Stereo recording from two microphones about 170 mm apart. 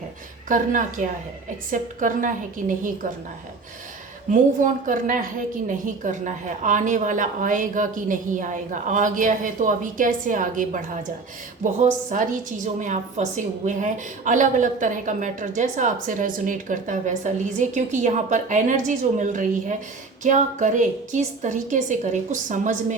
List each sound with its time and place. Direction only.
0.4 s a woman's voice: 50° right (ahead or behind)
4.3 s a woman's voice: 50° right (ahead or behind)